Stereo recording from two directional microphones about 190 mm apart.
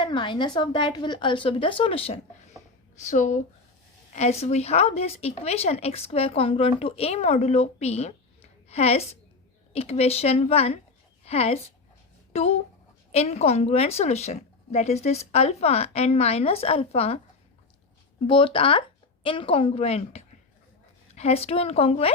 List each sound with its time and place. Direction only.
0.0 s a woman's voice: 25° left (ahead or behind)
18.3 s a woman's voice: 30° left (ahead or behind)